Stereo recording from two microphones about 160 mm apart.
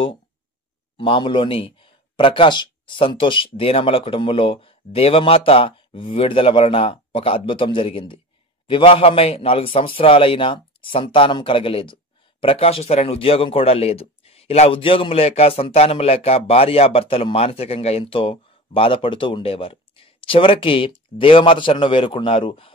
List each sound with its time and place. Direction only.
0.9 s a man's voice: 30° left (ahead or behind)